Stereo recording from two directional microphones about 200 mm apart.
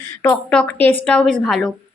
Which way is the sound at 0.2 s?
10° left (ahead or behind).